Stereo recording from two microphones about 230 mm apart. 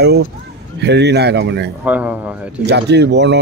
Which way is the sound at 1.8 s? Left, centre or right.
Centre.